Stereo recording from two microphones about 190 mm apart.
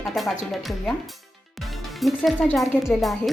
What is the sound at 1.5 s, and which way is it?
Music, centre (ahead or behind).